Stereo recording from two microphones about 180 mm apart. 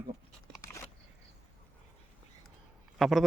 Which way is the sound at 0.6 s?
15° left (ahead or behind).